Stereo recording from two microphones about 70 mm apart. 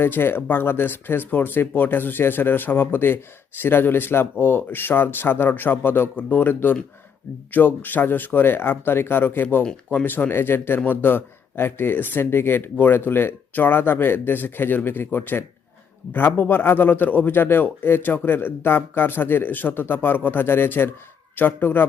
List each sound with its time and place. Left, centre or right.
0.0 s a man's voice: left